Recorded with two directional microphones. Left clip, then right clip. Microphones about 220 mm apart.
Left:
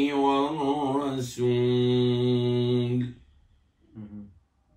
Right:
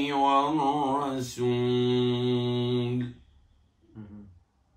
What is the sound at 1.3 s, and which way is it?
Mantra, 50° right (ahead or behind).